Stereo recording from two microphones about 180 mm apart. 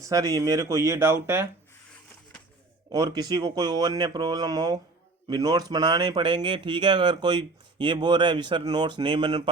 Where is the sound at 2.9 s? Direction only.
20° right (ahead or behind).